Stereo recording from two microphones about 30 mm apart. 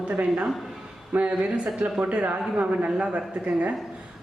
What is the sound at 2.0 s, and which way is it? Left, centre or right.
Speech, right.